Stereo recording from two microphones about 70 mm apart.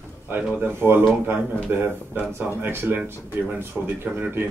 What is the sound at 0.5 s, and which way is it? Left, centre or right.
Speech, right.